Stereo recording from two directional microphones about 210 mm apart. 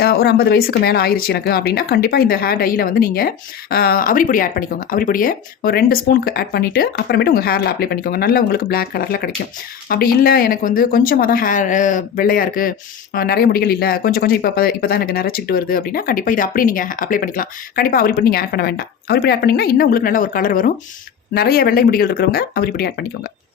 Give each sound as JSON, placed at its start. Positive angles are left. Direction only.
{"t": 0.0, "sound": "speech", "side_deg": 50}